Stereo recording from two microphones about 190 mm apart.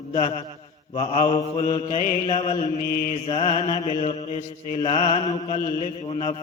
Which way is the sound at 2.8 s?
55° left (ahead or behind).